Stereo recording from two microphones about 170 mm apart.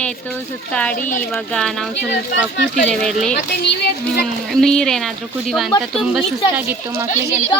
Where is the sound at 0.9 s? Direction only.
50° left (ahead or behind).